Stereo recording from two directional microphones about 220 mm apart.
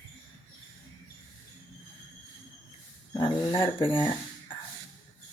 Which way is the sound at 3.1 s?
20° left (ahead or behind).